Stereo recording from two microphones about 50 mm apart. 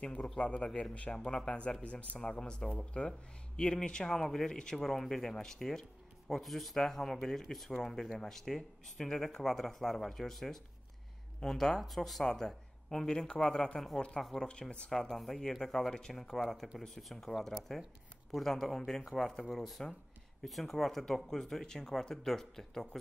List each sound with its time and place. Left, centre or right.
0.0 s speech: left; by 14.5 s centre
14.5 s speech: centre